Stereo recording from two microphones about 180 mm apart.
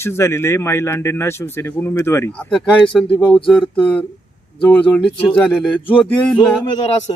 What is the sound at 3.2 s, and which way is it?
Speech, 25° left (ahead or behind).